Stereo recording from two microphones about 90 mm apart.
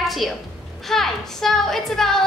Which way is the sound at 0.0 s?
Centre (ahead or behind).